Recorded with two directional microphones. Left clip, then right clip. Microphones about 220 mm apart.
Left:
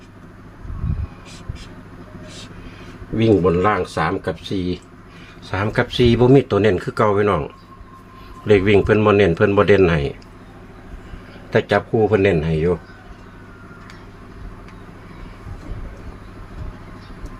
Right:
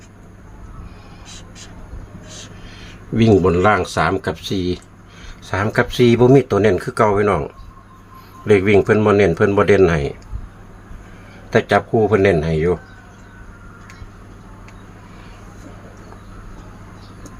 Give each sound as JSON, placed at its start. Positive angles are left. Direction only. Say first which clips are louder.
{"t": 3.2, "sound": "speech", "louder": "right 2 dB", "side_deg": -40}
{"t": 5.5, "sound": "speech", "louder": "right 2 dB", "side_deg": -10}
{"t": 8.4, "sound": "speech", "louder": "right 1 dB", "side_deg": -5}
{"t": 11.5, "sound": "a man's voice", "louder": "right 2 dB", "side_deg": -10}